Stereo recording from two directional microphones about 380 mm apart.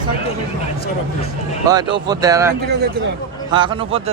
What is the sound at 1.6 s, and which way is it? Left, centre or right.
Speech, centre.